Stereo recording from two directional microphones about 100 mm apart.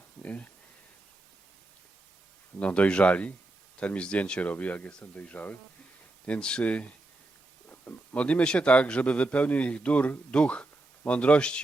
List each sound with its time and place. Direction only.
0.2 s speech: 15° left (ahead or behind)
2.6 s a man's voice: 15° left (ahead or behind)